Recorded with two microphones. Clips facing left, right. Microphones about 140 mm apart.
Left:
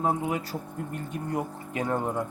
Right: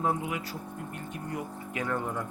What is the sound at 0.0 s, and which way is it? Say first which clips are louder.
Speech: left 3 dB; 30° left (ahead or behind).